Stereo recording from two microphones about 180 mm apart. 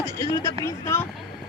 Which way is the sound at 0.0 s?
15° left (ahead or behind).